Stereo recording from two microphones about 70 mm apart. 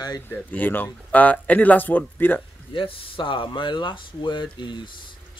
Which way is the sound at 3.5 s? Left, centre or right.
Left.